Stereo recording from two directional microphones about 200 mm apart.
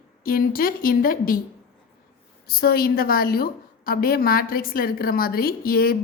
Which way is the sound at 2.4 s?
50° left (ahead or behind).